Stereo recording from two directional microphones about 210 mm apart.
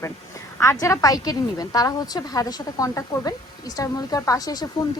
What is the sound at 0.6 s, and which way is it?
A woman's voice, 15° left (ahead or behind).